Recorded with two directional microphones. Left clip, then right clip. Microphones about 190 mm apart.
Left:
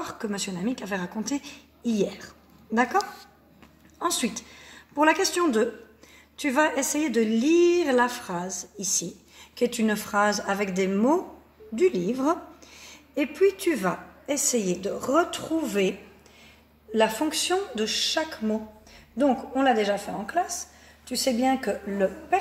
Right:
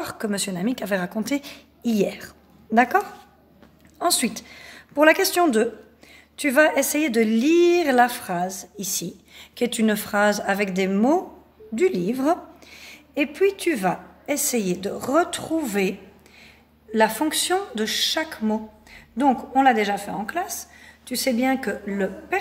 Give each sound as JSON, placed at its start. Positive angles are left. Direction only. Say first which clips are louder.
{"t": 0.0, "sound": "a woman's voice", "louder": "right 4 dB", "side_deg": -50}
{"t": 4.0, "sound": "a woman's voice", "louder": "right 5 dB", "side_deg": -45}
{"t": 13.2, "sound": "a woman's voice", "louder": "right 2 dB", "side_deg": -65}
{"t": 14.2, "sound": "speech", "louder": "right 1 dB", "side_deg": -40}
{"t": 16.9, "sound": "speech", "louder": "right 3 dB", "side_deg": -40}
{"t": 20.5, "sound": "a sound", "louder": "even", "side_deg": -70}